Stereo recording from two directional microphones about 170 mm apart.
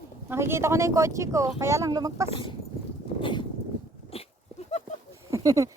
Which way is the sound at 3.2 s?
30° left (ahead or behind).